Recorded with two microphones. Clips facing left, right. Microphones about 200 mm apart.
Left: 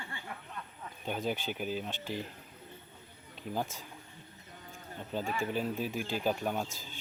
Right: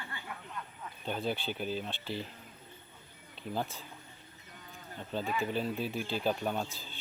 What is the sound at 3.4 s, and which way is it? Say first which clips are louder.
Speech: even; 10° left (ahead or behind).